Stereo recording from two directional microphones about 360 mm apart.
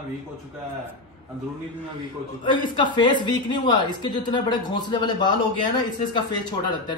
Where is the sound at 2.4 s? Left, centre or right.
Centre.